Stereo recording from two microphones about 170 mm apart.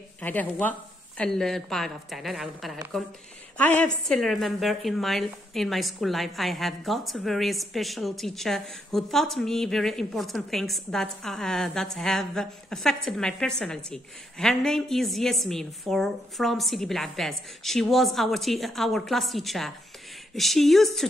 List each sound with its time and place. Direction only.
0.2 s a woman's voice: 10° left (ahead or behind)